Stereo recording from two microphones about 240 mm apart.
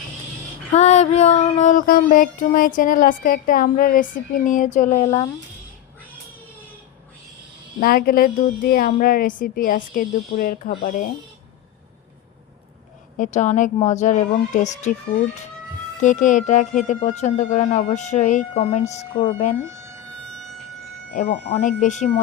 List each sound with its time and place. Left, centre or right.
0.7 s female singing: left
5.0 s speech: centre
7.8 s female singing: left
10.8 s speech: left
13.1 s speech: left
16.0 s female singing: left
21.2 s female singing: left